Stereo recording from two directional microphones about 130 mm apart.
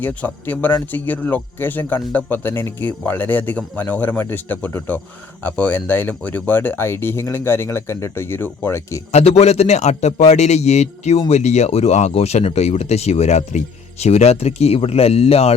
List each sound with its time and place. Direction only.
0.0 s speech: 10° left (ahead or behind)
9.1 s speech: 55° left (ahead or behind)